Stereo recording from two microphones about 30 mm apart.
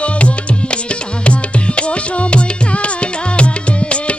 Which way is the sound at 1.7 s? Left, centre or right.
Left.